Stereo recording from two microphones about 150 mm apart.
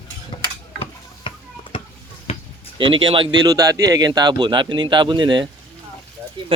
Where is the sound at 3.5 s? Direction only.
25° right (ahead or behind).